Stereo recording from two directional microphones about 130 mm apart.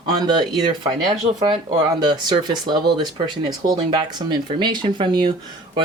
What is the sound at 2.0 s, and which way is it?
Speech, 35° right (ahead or behind).